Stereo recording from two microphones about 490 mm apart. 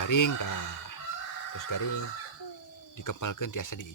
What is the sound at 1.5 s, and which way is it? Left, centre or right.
Speech, left.